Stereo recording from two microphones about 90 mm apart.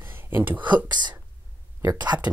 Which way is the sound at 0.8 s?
55° right (ahead or behind).